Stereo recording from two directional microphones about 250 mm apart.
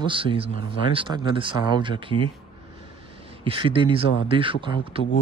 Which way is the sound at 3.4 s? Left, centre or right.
Centre.